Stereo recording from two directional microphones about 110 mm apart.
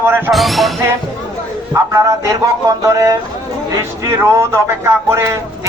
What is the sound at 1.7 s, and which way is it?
A man's voice, 25° right (ahead or behind).